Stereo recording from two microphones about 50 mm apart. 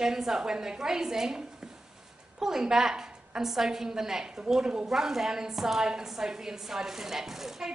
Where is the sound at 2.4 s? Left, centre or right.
Centre.